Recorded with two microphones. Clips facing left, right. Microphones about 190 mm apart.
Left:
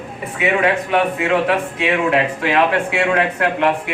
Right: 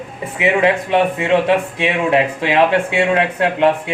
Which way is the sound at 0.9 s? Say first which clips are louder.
Right 2 dB; 25° right (ahead or behind).